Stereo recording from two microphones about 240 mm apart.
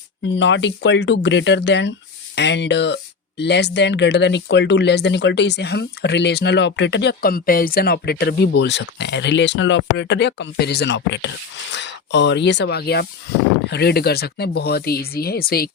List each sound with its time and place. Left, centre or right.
0.3 s speech: left